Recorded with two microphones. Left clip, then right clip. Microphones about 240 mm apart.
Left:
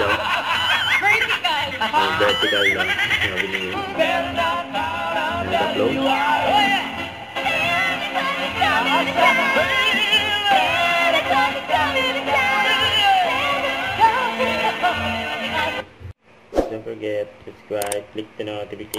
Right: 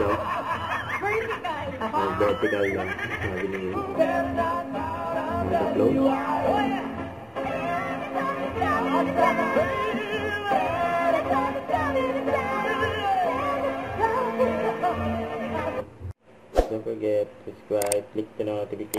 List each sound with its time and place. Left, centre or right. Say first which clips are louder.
0.1 s snicker: left 7 dB; centre
7.3 s music: left 8 dB; centre
16.6 s a sound: left 3 dB; centre